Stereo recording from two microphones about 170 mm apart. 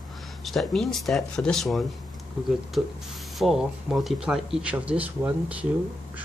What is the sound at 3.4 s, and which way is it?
Speech, centre (ahead or behind).